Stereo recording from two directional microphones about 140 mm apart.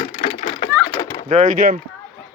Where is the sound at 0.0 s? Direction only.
45° left (ahead or behind).